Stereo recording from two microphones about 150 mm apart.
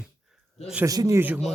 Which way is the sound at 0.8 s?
25° right (ahead or behind).